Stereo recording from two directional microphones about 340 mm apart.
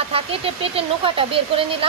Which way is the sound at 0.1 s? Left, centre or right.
Centre.